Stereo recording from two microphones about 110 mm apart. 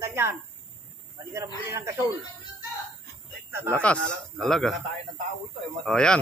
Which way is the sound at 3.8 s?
5° left (ahead or behind).